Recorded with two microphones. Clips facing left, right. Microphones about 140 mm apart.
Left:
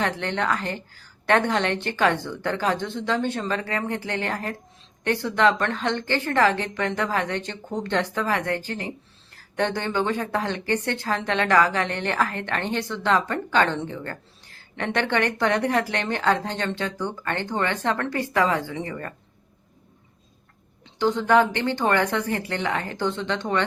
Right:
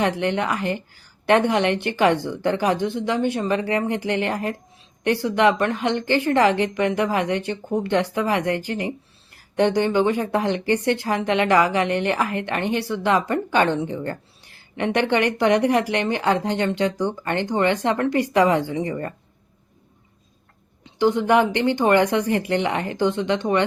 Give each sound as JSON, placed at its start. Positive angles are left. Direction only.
{"t": 0.0, "sound": "speech", "side_deg": -15}
{"t": 20.8, "sound": "speech", "side_deg": -15}